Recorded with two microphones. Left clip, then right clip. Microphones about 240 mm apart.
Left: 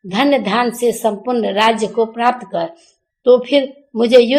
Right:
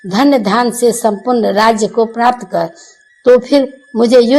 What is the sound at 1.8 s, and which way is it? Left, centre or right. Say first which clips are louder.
Speech: right 4 dB; right.